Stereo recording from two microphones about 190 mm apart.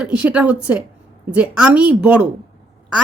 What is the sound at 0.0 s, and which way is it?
A woman's voice, 5° right (ahead or behind).